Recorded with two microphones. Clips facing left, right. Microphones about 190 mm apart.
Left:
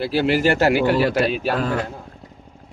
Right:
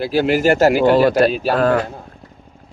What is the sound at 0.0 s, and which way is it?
Speech, 45° right (ahead or behind).